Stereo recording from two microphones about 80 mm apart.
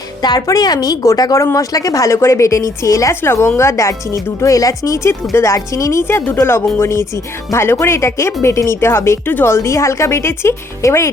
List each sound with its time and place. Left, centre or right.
0.2 s a woman's voice: left
3.2 s speech: left